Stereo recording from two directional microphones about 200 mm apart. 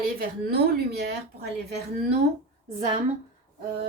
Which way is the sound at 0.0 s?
50° right (ahead or behind).